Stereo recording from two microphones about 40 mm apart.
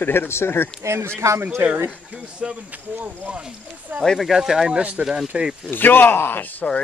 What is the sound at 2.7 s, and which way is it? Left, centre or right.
Speech, right.